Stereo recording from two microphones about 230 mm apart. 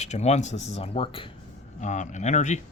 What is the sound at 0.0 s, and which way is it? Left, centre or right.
Speech, left.